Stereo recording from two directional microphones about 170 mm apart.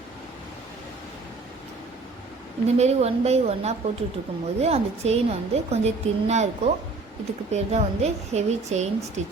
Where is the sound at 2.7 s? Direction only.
40° right (ahead or behind).